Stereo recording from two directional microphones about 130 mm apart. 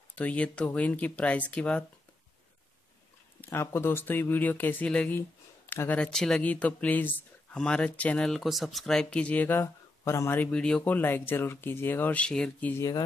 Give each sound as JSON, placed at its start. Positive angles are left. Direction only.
{"t": 0.1, "sound": "speech", "side_deg": 10}
{"t": 3.3, "sound": "speech", "side_deg": 20}
{"t": 10.5, "sound": "speech", "side_deg": 10}